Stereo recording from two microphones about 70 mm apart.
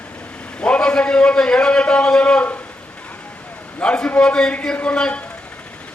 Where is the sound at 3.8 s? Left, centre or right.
Centre.